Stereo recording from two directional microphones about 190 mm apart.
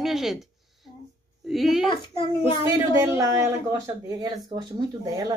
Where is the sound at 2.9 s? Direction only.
15° right (ahead or behind).